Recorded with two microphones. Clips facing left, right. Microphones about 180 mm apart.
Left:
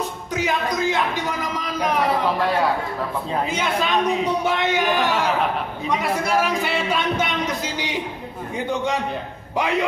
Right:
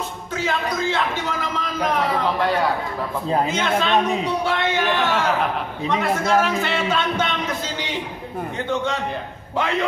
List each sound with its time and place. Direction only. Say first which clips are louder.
0.4 s a man's voice: left 1 dB; 15° left (ahead or behind)
3.5 s speech: right 2 dB; 10° left (ahead or behind)